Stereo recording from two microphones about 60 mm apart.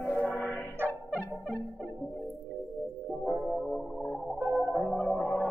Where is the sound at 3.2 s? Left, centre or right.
Centre.